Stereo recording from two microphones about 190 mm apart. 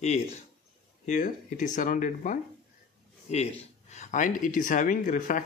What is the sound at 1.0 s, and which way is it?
Speech, 40° left (ahead or behind).